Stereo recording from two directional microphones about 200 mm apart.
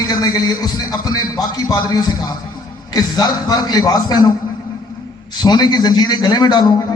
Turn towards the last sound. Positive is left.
turn(degrees=20)  # may be behind; listen again after turning